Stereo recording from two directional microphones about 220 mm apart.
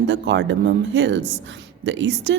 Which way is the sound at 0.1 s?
55° right (ahead or behind).